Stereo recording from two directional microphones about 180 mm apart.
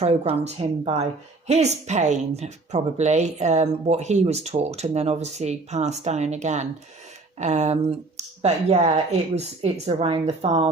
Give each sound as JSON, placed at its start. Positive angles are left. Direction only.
{"t": 0.0, "sound": "speech", "side_deg": -35}